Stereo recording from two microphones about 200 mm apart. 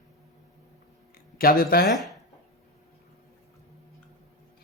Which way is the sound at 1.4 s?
50° left (ahead or behind).